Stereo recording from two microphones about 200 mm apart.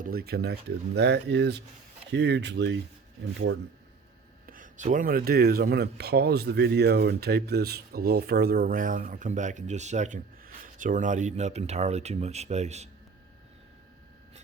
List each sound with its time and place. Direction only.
0.0 s speech: 50° right (ahead or behind)
4.4 s speech: 45° right (ahead or behind)